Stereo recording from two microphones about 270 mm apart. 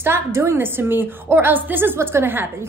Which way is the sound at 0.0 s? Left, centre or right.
Centre.